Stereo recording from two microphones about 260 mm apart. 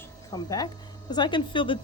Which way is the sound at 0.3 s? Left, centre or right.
Centre.